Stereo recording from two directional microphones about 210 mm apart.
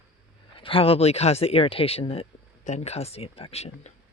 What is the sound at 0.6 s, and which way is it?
Speech, 25° left (ahead or behind).